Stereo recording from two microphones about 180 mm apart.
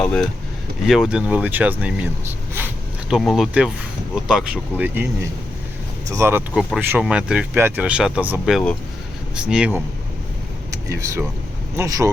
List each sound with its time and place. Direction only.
0.0 s speech: 5° left (ahead or behind)
6.1 s speech: 15° right (ahead or behind)
10.7 s speech: 15° right (ahead or behind)